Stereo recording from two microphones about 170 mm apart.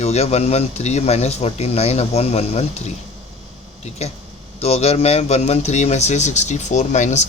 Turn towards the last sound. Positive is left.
turn(degrees=45)  # may be behind; listen again after turning